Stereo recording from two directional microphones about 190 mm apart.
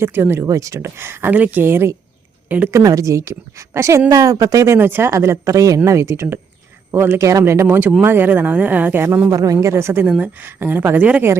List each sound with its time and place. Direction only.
0.0 s speech: 10° right (ahead or behind)